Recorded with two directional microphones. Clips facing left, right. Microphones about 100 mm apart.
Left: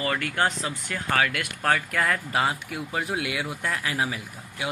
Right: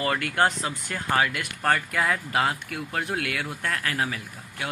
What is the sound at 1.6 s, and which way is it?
Speech, centre (ahead or behind).